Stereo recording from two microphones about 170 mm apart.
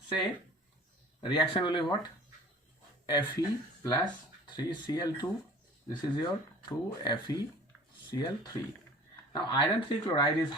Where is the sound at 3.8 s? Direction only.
25° left (ahead or behind).